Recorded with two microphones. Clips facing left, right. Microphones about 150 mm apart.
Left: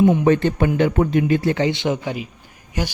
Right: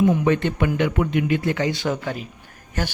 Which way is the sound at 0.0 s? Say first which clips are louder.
Left 3 dB; 25° left (ahead or behind).